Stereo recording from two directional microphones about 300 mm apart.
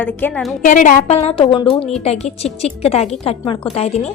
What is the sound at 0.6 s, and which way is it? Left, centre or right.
A woman's voice, left.